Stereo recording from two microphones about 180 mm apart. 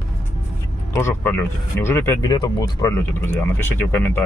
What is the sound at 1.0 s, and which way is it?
Speech, 15° left (ahead or behind).